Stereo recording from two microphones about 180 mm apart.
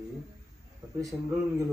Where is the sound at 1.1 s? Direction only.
25° right (ahead or behind).